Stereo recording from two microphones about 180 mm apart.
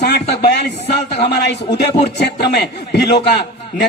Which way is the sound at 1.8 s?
70° left (ahead or behind).